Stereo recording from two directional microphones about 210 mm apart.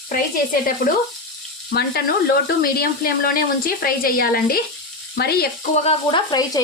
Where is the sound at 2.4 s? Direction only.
45° left (ahead or behind).